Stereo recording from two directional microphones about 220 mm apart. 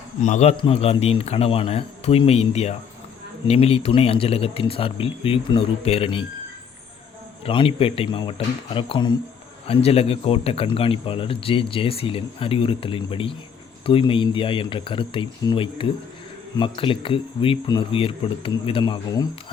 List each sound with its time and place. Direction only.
0.2 s speech: 35° left (ahead or behind)
7.4 s speech: 25° left (ahead or behind)